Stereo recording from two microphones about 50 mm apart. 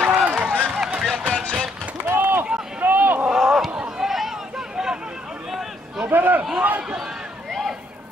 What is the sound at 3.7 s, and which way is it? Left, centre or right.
Run, centre.